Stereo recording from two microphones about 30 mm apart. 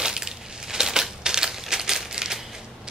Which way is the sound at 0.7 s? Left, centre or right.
Centre.